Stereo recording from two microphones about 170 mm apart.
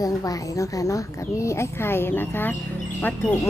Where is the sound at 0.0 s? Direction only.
20° left (ahead or behind).